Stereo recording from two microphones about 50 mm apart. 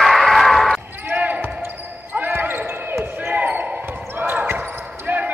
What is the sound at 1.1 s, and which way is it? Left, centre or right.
Basketball bounce, right.